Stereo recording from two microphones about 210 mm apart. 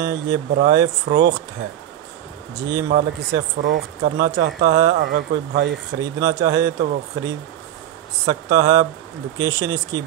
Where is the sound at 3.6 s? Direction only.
55° right (ahead or behind).